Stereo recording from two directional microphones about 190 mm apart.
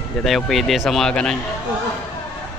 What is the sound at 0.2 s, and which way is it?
Speech, centre (ahead or behind).